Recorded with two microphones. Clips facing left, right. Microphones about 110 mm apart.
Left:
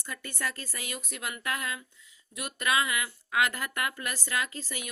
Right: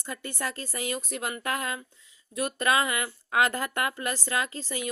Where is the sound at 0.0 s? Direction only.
25° right (ahead or behind).